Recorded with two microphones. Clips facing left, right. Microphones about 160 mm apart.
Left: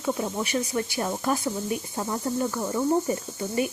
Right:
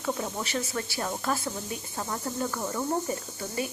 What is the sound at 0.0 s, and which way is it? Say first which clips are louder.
Speech: left 4 dB; 15° left (ahead or behind).